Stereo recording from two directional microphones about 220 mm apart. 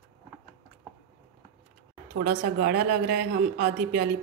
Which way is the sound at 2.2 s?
45° right (ahead or behind).